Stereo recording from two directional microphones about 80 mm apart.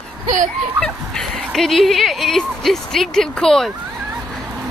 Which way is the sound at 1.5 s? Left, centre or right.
Centre.